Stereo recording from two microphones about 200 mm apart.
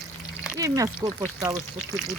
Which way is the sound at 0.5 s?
15° right (ahead or behind).